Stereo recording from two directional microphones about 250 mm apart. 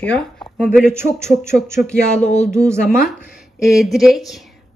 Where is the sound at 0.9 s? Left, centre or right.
Centre.